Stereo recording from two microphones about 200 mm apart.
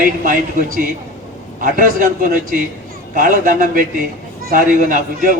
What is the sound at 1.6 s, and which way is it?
A man's voice, 40° right (ahead or behind).